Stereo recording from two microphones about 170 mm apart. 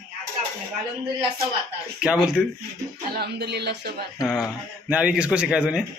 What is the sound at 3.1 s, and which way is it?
Speech, 75° right (ahead or behind).